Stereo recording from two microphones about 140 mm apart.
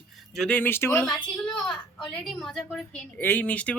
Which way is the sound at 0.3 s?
10° left (ahead or behind).